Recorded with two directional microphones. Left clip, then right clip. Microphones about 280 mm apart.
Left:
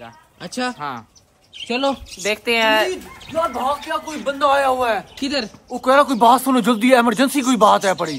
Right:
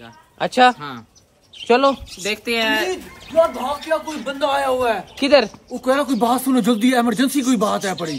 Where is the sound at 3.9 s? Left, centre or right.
Centre.